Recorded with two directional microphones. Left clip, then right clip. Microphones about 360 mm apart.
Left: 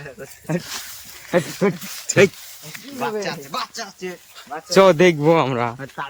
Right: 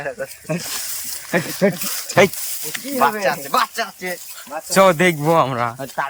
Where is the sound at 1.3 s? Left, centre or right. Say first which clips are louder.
Right 1 dB; centre.